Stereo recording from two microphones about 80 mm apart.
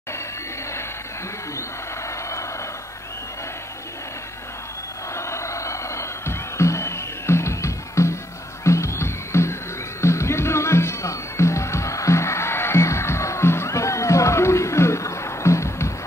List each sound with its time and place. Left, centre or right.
2.0 s vehicle: left
5.1 s music: left